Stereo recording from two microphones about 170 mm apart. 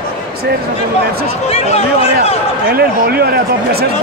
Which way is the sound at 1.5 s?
40° left (ahead or behind).